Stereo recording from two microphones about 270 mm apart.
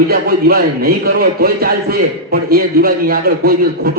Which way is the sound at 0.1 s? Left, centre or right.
Right.